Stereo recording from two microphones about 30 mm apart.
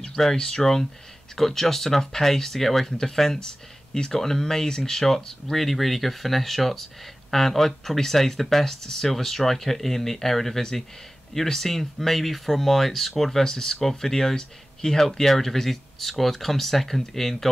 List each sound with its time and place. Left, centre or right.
0.4 s speech: left
1.3 s speech: centre